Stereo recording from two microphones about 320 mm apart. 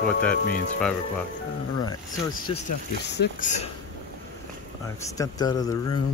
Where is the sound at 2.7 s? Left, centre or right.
Left.